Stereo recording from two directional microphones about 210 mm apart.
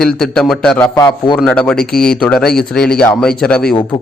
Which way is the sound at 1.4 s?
5° left (ahead or behind).